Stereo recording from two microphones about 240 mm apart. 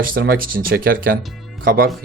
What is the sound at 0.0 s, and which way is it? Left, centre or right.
A man's voice, right.